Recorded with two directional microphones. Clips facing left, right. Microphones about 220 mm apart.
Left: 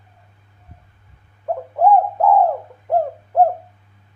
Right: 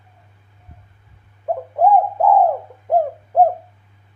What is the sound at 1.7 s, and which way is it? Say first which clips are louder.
Bird: even; 15° right (ahead or behind).